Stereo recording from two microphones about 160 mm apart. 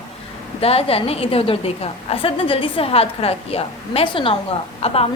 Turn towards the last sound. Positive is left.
turn(degrees=40)  # may be behind; listen again after turning